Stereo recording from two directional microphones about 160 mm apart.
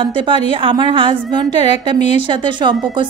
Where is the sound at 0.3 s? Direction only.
30° right (ahead or behind).